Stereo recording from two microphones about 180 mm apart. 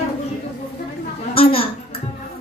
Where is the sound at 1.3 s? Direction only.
30° left (ahead or behind).